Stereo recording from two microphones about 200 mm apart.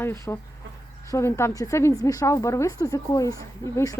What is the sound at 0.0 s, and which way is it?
Speech, 10° left (ahead or behind).